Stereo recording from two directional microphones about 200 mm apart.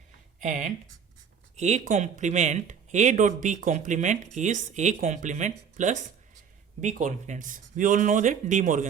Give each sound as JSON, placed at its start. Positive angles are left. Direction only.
{"t": 0.3, "sound": "speech", "side_deg": -40}